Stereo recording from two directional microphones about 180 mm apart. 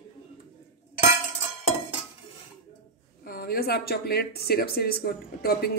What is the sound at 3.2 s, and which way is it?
Speech, 55° left (ahead or behind).